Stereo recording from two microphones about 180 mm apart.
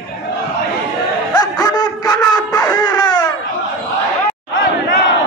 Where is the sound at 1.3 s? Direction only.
20° left (ahead or behind).